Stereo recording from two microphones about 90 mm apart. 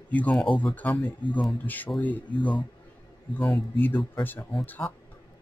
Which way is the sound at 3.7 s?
20° left (ahead or behind).